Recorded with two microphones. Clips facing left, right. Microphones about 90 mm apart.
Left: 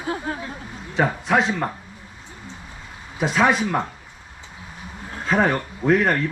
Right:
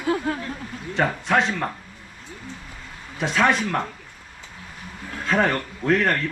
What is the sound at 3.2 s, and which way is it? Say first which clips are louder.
Speech: left 2 dB; 5° left (ahead or behind).